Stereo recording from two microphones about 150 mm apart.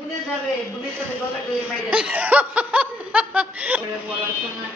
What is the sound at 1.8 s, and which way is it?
Speech, 10° right (ahead or behind).